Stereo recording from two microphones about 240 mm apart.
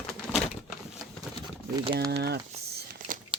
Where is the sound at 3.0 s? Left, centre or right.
Right.